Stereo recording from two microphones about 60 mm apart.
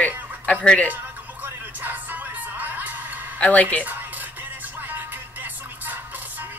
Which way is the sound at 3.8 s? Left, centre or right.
Right.